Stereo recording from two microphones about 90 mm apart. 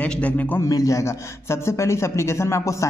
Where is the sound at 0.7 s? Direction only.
40° left (ahead or behind).